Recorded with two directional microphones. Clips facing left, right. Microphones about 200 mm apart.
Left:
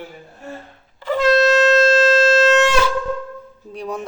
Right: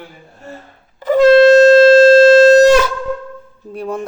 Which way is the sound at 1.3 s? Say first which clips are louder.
Right 8 dB; 30° right (ahead or behind).